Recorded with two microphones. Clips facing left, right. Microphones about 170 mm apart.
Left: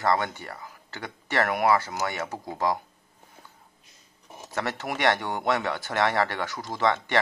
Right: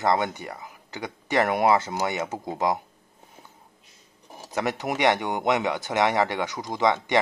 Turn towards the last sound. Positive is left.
turn(degrees=-15)  # may be behind; listen again after turning